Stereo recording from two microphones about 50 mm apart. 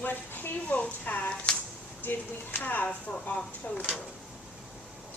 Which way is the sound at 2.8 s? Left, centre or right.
Left.